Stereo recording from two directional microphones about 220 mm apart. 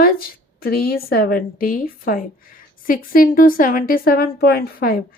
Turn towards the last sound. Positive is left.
turn(degrees=40)  # may be behind; listen again after turning